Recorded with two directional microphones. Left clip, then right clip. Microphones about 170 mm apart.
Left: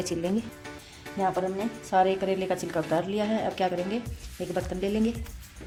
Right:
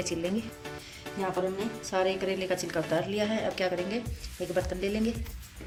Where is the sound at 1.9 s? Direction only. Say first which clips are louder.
Left 5 dB; 50° left (ahead or behind).